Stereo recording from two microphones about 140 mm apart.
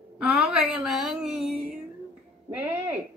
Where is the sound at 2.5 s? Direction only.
20° right (ahead or behind).